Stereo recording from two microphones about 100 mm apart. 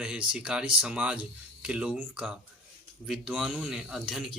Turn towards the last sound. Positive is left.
turn(degrees=-5)  # may be behind; listen again after turning